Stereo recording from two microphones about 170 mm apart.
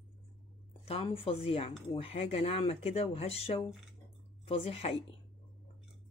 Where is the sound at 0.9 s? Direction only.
35° left (ahead or behind).